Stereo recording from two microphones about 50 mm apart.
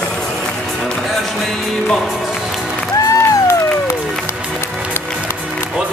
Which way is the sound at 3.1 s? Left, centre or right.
Left.